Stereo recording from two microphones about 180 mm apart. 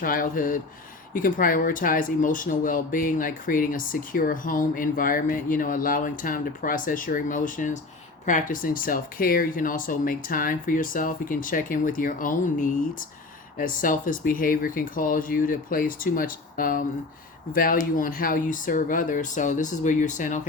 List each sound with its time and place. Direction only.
0.0 s speech: 50° left (ahead or behind)